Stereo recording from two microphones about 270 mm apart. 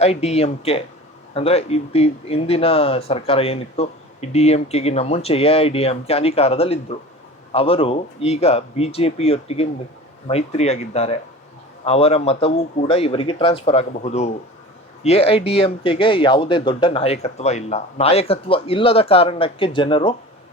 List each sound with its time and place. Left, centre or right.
0.0 s speech: left